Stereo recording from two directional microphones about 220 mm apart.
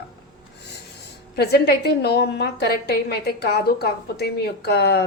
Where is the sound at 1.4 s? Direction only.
45° left (ahead or behind).